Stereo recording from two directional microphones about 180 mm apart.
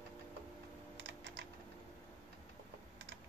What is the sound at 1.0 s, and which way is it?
Typing, 90° right.